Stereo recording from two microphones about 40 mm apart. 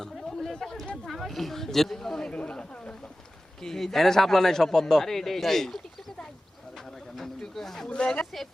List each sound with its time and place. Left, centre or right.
0.0 s chatter: centre
1.0 s a man's voice: centre
2.3 s a sound: left
3.6 s a man's voice: centre
6.7 s a sound: centre
7.9 s speech: left